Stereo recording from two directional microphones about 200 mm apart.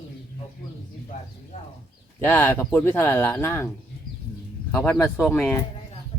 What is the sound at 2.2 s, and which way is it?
Speech, 10° left (ahead or behind).